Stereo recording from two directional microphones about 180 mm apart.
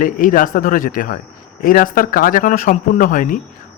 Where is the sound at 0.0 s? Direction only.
50° left (ahead or behind).